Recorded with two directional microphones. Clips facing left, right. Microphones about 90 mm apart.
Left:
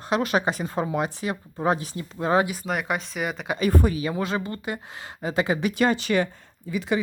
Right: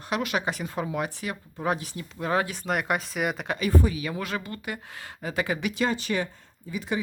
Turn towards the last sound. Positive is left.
turn(degrees=90)